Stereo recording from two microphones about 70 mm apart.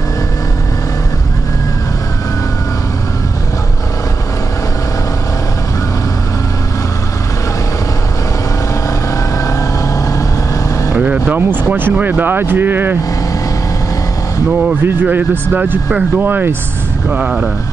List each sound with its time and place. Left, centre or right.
11.0 s vehicle: centre
11.7 s speech: right
15.0 s speech: right
17.1 s speech: centre